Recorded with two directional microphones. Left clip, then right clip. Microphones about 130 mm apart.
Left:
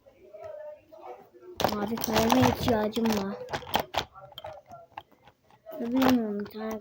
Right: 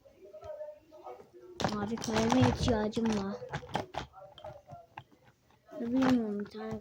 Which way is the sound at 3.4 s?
25° left (ahead or behind).